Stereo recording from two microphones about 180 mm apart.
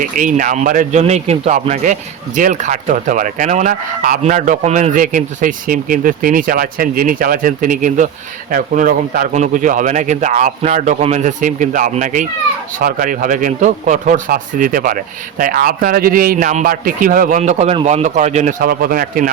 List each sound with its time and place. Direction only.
0.0 s a man's voice: 45° right (ahead or behind)
18.6 s a man's voice: 55° right (ahead or behind)